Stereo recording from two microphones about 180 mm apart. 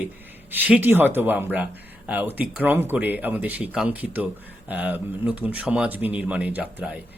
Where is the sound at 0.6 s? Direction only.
10° right (ahead or behind).